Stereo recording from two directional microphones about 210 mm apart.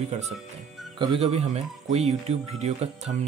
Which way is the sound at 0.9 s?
30° right (ahead or behind).